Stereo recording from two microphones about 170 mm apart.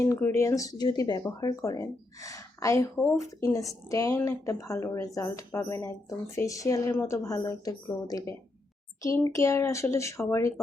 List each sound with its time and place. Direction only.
0.0 s speech: 15° left (ahead or behind)